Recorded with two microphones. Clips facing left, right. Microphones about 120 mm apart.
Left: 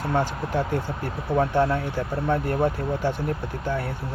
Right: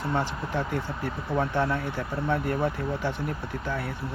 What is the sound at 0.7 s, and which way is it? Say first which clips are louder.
Speech: left 3 dB; 40° left (ahead or behind).